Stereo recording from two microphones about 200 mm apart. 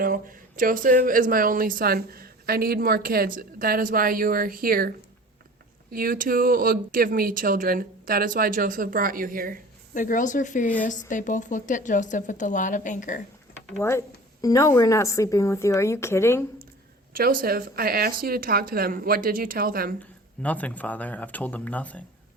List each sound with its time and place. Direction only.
0.0 s speech: 45° right (ahead or behind)
9.9 s a woman's voice: 40° left (ahead or behind)
14.4 s a woman's voice: 15° left (ahead or behind)
17.2 s speech: 45° right (ahead or behind)
20.4 s a woman's voice: 5° left (ahead or behind)